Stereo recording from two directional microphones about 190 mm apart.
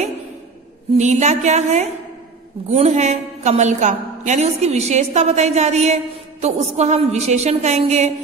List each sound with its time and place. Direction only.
0.9 s a woman's voice: 35° right (ahead or behind)